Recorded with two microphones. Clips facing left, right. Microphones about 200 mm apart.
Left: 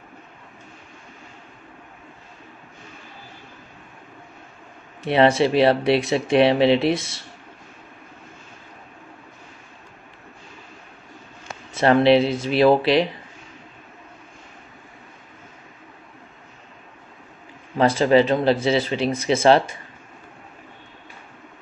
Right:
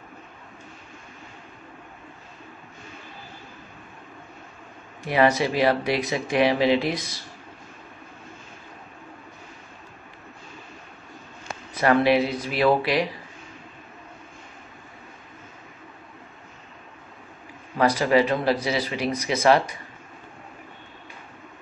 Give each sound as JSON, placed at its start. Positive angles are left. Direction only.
{"t": 5.0, "sound": "speech", "side_deg": 25}
{"t": 11.7, "sound": "speech", "side_deg": 25}
{"t": 17.7, "sound": "speech", "side_deg": 25}